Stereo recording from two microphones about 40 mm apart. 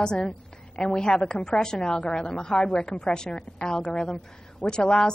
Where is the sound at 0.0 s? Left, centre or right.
Centre.